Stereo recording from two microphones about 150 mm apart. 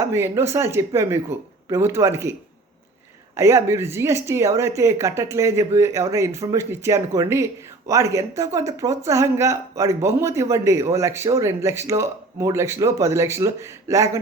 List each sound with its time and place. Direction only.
0.0 s speech: 15° right (ahead or behind)
3.3 s speech: 20° right (ahead or behind)